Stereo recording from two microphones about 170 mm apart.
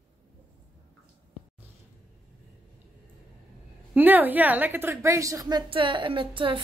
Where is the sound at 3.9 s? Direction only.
10° right (ahead or behind).